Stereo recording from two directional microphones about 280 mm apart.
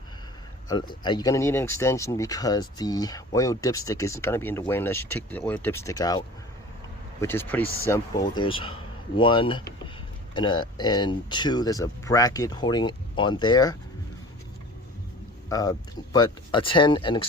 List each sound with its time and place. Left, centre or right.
0.7 s speech: centre
15.4 s speech: centre